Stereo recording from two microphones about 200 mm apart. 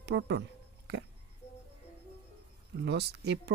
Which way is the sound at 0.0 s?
60° right (ahead or behind).